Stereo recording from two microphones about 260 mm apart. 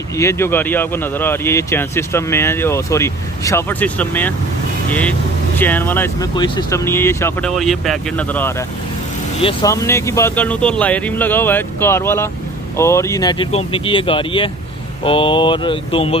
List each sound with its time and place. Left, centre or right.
0.2 s speech: centre
5.6 s speech: centre